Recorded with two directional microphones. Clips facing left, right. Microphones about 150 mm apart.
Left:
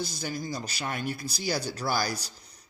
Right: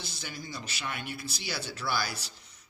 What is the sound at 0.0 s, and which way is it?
Speech, 40° left (ahead or behind).